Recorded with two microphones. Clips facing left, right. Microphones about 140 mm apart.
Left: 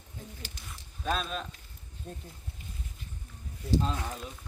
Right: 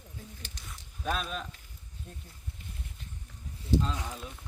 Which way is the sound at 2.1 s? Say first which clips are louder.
Left 7 dB; 40° left (ahead or behind).